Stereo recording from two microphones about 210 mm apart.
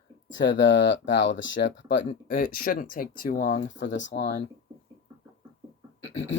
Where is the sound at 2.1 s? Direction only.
40° left (ahead or behind).